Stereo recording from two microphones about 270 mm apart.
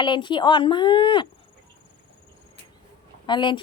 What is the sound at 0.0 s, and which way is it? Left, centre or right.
Speech, centre.